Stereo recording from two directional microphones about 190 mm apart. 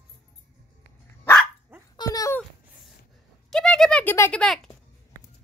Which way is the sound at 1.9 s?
20° left (ahead or behind).